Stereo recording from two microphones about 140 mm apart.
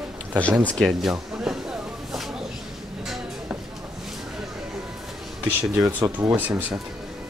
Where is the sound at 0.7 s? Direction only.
Centre (ahead or behind).